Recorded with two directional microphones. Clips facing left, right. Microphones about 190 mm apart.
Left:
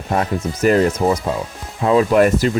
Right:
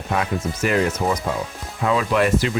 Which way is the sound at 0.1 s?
40° left (ahead or behind).